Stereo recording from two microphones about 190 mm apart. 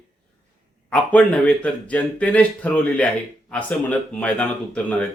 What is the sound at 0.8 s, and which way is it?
Speech, 5° left (ahead or behind).